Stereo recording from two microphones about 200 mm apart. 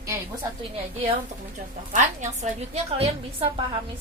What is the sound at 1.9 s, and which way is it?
A woman's voice, 35° right (ahead or behind).